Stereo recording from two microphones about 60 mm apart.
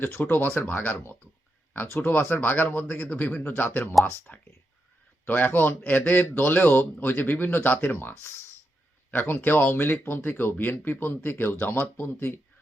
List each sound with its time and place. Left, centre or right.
0.3 s speech: left
2.0 s speech: left
4.0 s speech: centre
5.2 s speech: left
9.1 s speech: left